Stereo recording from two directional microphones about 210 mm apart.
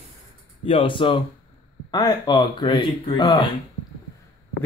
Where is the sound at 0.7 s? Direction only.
25° left (ahead or behind).